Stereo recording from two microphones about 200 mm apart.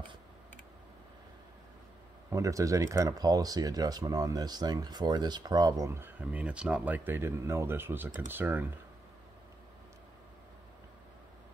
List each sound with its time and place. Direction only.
2.3 s speech: 15° right (ahead or behind)